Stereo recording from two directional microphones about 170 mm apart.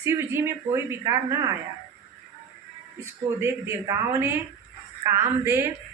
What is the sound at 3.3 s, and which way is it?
A woman's voice, 15° right (ahead or behind).